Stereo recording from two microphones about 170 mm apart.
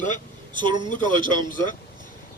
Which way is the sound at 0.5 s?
25° right (ahead or behind).